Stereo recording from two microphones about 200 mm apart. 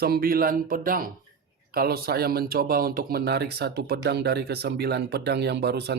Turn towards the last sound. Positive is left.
turn(degrees=-55)  # may be behind; listen again after turning